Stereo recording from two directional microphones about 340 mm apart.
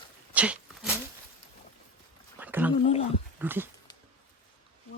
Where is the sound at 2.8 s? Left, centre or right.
Centre.